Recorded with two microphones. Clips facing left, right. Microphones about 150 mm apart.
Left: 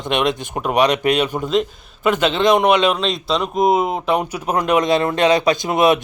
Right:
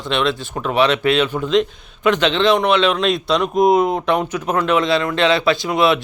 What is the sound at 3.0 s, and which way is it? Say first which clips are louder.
Speech: right 3 dB; centre (ahead or behind).